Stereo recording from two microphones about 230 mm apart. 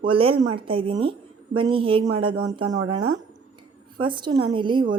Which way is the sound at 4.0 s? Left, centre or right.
Right.